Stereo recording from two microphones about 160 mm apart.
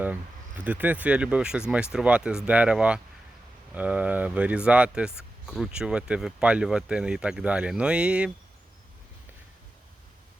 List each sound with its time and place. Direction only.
0.6 s speech: 10° right (ahead or behind)